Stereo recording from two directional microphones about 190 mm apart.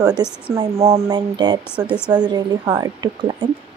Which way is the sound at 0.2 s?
25° right (ahead or behind).